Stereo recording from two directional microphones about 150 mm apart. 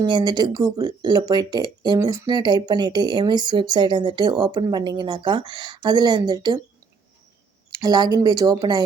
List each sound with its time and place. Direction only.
0.0 s speech: 30° right (ahead or behind)
7.7 s speech: 25° right (ahead or behind)